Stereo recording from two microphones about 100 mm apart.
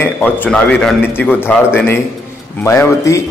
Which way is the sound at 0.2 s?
10° left (ahead or behind).